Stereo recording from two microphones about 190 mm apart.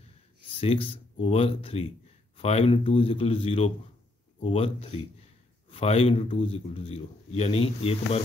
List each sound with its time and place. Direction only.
0.6 s speech: 30° left (ahead or behind)